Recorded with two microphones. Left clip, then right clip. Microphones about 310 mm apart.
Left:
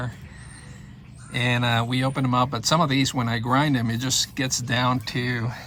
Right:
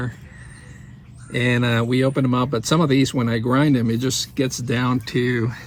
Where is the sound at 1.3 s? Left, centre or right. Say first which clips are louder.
Right 2 dB; centre.